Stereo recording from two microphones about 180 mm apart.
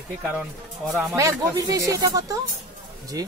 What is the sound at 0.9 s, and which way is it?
Speech, centre (ahead or behind).